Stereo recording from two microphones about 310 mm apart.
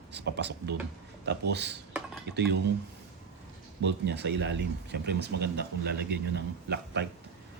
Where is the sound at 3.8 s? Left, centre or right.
Right.